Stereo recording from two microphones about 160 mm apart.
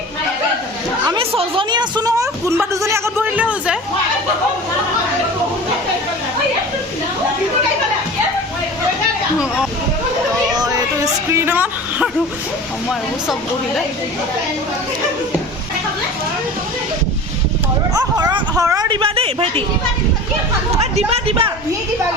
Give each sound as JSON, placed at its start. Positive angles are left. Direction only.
{"t": 1.0, "sound": "a woman's voice", "side_deg": -30}
{"t": 10.5, "sound": "speech", "side_deg": -25}
{"t": 17.9, "sound": "speech", "side_deg": -25}
{"t": 20.9, "sound": "speech", "side_deg": -40}